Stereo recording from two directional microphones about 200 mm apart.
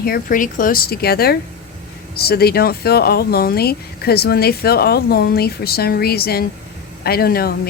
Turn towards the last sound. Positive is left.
turn(degrees=50)  # may be behind; listen again after turning